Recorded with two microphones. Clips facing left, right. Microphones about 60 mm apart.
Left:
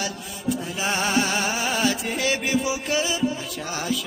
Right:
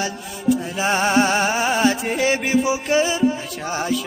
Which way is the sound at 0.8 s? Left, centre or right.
Right.